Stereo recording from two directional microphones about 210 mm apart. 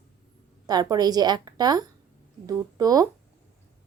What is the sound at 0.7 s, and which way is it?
Speech, 20° right (ahead or behind).